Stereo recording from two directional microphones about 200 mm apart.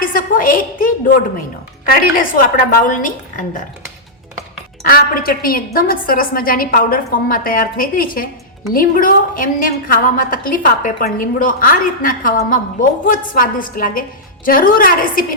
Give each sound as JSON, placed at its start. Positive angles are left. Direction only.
{"t": 0.0, "sound": "a sound", "side_deg": 45}
{"t": 1.8, "sound": "a woman's voice", "side_deg": 40}
{"t": 4.9, "sound": "a woman's voice", "side_deg": 45}